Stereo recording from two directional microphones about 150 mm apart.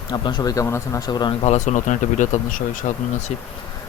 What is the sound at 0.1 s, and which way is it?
Speech, 30° left (ahead or behind).